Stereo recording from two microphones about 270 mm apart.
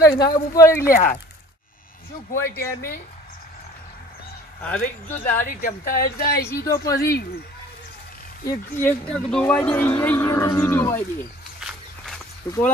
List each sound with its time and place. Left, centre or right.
0.0 s speech: centre
2.4 s speech: centre
4.6 s speech: centre
5.4 s a woman's voice: left
6.7 s speech: centre
7.0 s a woman's voice: left
8.5 s speech: centre
12.4 s speech: centre